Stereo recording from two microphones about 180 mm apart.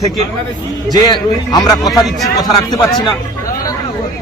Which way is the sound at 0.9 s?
20° left (ahead or behind).